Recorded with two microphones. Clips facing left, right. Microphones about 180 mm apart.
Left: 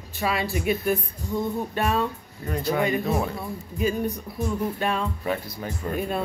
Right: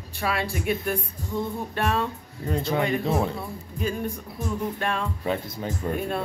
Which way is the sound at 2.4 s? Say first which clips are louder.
Left 1 dB; 25° right (ahead or behind).